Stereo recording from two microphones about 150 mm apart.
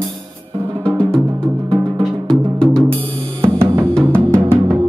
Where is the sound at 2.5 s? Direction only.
5° left (ahead or behind).